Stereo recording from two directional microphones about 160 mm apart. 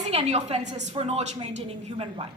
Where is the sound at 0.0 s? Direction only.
45° right (ahead or behind).